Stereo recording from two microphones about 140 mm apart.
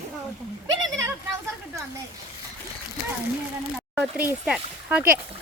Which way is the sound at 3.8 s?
10° right (ahead or behind).